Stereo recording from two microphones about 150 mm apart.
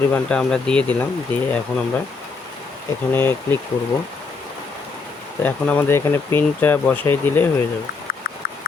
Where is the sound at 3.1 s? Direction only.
15° left (ahead or behind).